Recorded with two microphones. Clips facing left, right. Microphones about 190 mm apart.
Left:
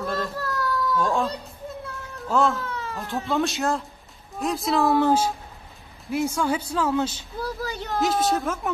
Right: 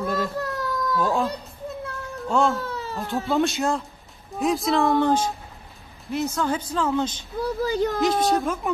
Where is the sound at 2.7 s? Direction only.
35° right (ahead or behind).